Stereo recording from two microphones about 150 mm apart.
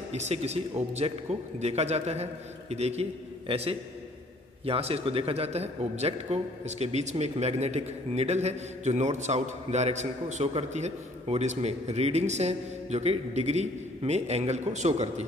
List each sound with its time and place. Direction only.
0.1 s a man's voice: 45° right (ahead or behind)